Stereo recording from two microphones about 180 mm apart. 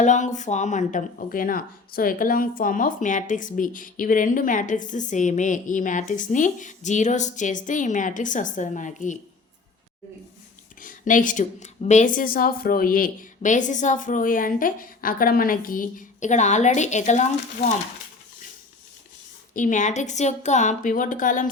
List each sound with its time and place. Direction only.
0.0 s speech: 40° left (ahead or behind)
10.8 s speech: 45° left (ahead or behind)
19.5 s speech: 45° left (ahead or behind)